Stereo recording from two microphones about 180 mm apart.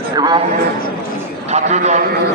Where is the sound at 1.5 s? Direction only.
40° right (ahead or behind).